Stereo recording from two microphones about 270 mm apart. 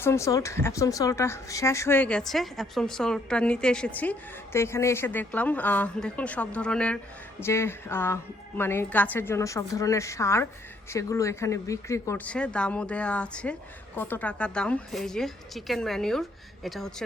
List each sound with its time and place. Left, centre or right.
0.0 s speech: centre